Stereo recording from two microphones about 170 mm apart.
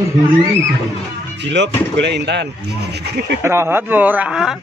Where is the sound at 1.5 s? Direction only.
90° right.